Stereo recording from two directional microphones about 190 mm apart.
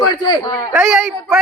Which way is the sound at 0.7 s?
5° right (ahead or behind).